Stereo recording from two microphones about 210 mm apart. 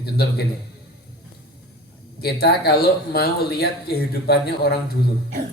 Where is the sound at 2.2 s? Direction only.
50° left (ahead or behind).